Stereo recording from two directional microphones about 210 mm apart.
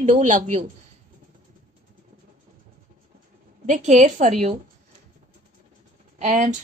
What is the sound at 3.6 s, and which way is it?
Speech, 35° right (ahead or behind).